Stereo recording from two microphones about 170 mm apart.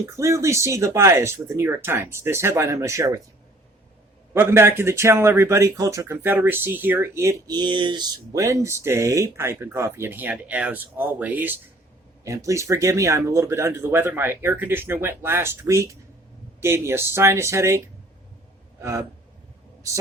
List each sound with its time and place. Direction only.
0.0 s speech: 15° right (ahead or behind)
4.4 s speech: 15° right (ahead or behind)